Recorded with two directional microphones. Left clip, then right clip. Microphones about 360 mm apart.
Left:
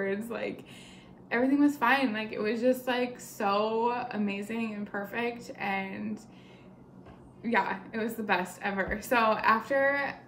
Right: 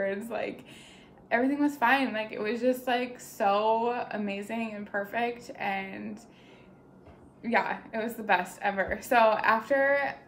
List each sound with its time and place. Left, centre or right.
0.0 s a woman's voice: centre
7.4 s a woman's voice: centre